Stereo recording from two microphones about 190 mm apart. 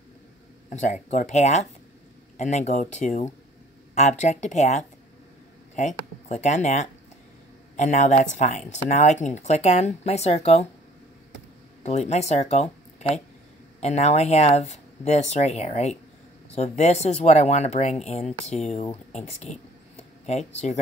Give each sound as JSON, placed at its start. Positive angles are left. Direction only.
{"t": 0.7, "sound": "speech", "side_deg": 40}
{"t": 11.8, "sound": "speech", "side_deg": 35}
{"t": 13.7, "sound": "speech", "side_deg": 35}